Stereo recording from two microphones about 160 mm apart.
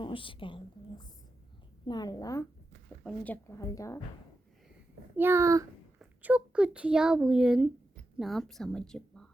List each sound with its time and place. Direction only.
0.0 s a woman's voice: 30° left (ahead or behind)
3.0 s speech: 5° left (ahead or behind)
3.6 s a woman's voice: 20° left (ahead or behind)
5.1 s a child's voice: 15° right (ahead or behind)
6.0 s a child's voice: 10° right (ahead or behind)